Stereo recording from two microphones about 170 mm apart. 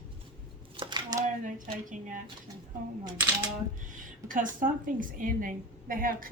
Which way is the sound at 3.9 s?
50° right (ahead or behind).